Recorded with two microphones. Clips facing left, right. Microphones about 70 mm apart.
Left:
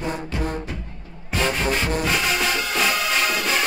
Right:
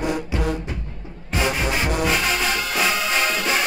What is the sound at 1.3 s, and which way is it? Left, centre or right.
Music, centre.